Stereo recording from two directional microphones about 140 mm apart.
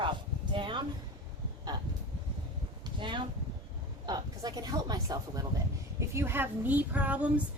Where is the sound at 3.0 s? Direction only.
35° right (ahead or behind).